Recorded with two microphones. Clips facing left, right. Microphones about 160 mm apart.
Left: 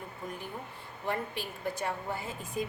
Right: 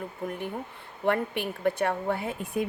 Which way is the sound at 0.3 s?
65° right (ahead or behind).